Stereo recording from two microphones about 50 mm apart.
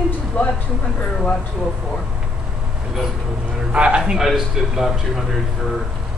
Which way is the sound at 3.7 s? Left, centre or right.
Centre.